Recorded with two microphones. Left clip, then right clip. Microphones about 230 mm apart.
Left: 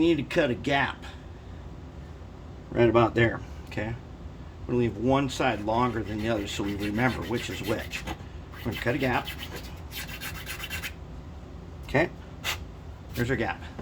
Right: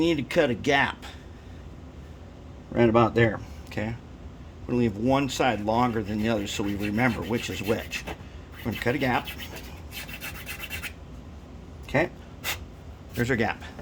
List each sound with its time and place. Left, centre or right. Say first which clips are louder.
0.0 s speech: right 1 dB; right
2.7 s speech: right 1 dB; right
11.9 s a sound: even; right
13.1 s speech: right 3 dB; right